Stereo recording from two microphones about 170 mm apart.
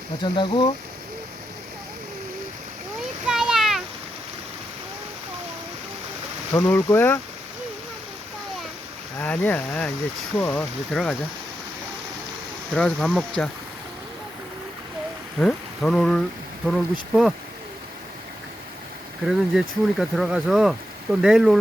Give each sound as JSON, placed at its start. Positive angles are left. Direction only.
{"t": 0.2, "sound": "speech", "side_deg": 25}
{"t": 3.2, "sound": "a sound", "side_deg": -5}
{"t": 6.5, "sound": "speech", "side_deg": 10}
{"t": 9.1, "sound": "speech", "side_deg": 10}
{"t": 12.7, "sound": "speech", "side_deg": 5}
{"t": 15.4, "sound": "speech", "side_deg": 0}
{"t": 19.2, "sound": "speech", "side_deg": 0}